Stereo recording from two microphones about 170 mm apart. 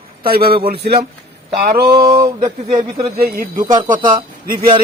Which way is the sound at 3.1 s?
60° right (ahead or behind).